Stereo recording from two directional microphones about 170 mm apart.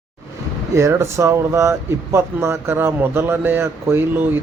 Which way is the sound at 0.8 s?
15° right (ahead or behind).